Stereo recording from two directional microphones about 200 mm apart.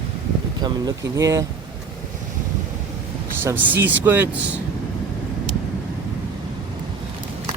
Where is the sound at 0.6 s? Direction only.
15° right (ahead or behind).